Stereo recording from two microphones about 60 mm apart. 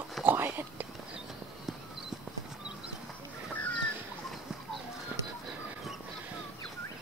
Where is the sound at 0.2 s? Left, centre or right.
Right.